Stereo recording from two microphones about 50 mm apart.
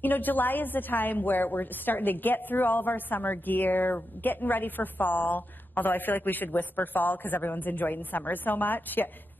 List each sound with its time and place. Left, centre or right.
0.0 s a woman's voice: left